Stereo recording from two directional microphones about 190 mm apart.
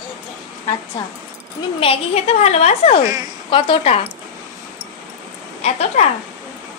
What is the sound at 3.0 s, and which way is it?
Speech, 20° right (ahead or behind).